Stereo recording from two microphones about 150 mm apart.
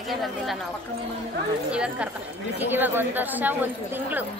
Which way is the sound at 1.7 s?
5° right (ahead or behind).